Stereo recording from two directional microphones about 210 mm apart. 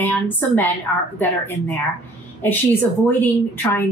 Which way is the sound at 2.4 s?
10° left (ahead or behind).